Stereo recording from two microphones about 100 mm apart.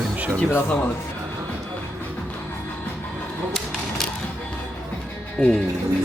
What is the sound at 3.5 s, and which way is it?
Mechanisms, 5° left (ahead or behind).